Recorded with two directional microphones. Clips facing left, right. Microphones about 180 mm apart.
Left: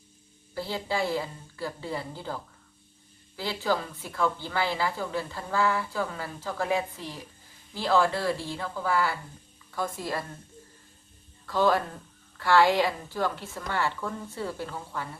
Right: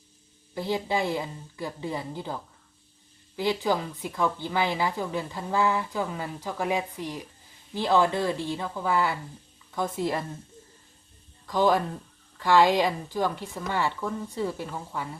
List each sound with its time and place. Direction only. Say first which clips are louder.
0.5 s a woman's voice: right 3 dB; 15° right (ahead or behind)
11.4 s speech: right 1 dB; 15° right (ahead or behind)